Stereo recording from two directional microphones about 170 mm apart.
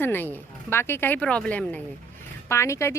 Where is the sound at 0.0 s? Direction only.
10° left (ahead or behind).